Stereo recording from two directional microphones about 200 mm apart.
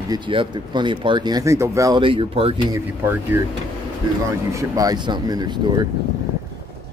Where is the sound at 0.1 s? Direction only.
25° right (ahead or behind).